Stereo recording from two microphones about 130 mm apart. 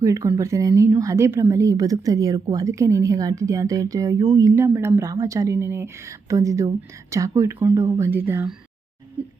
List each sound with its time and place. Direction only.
0.0 s speech: 25° right (ahead or behind)